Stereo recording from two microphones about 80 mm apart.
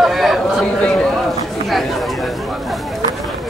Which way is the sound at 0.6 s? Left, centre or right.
Centre.